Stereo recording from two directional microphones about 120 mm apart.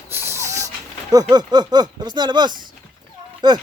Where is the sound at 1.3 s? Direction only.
35° right (ahead or behind).